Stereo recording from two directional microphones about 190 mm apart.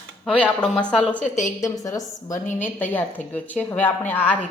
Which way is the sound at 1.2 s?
40° left (ahead or behind).